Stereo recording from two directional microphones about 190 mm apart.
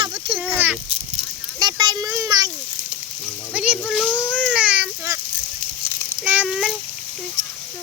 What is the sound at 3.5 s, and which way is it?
Speech, 5° right (ahead or behind).